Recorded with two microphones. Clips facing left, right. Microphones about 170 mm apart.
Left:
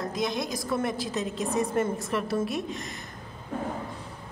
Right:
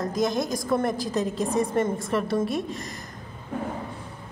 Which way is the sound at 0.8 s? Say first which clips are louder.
Right 4 dB; centre (ahead or behind).